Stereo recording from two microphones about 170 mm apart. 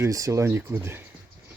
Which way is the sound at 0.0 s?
20° right (ahead or behind).